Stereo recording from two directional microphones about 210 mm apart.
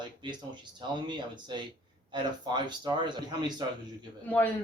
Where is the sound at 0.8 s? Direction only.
20° right (ahead or behind).